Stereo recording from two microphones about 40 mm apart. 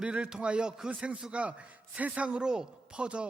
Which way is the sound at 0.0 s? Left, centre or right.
Right.